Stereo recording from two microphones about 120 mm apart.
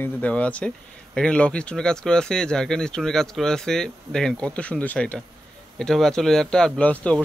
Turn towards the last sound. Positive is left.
turn(degrees=10)  # may be behind; listen again after turning